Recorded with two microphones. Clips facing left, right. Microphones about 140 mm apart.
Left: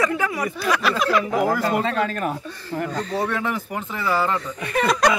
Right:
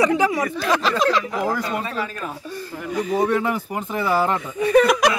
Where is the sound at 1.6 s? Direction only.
70° left (ahead or behind).